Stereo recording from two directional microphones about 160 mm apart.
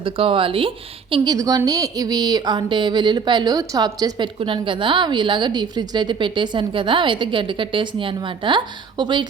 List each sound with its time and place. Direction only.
0.0 s a woman's voice: 35° right (ahead or behind)